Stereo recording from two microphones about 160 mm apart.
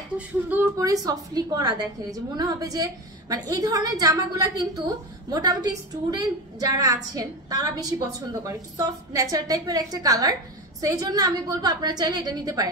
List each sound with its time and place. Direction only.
0.5 s a woman's voice: 15° right (ahead or behind)